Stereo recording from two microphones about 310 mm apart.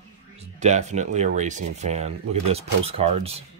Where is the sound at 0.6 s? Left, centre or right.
Right.